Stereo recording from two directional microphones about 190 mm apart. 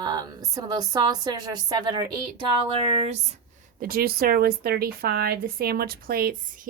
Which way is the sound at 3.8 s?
50° right (ahead or behind).